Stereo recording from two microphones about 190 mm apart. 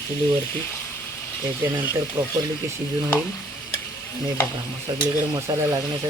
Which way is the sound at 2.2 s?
25° right (ahead or behind).